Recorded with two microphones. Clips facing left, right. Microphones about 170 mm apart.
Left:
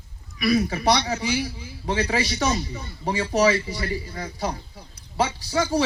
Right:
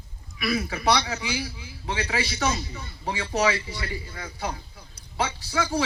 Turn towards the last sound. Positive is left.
turn(degrees=35)  # may be behind; listen again after turning